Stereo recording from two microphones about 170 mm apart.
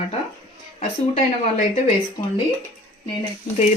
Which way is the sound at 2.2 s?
35° left (ahead or behind).